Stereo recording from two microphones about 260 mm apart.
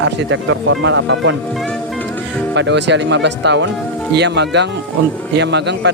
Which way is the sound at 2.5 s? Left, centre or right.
Right.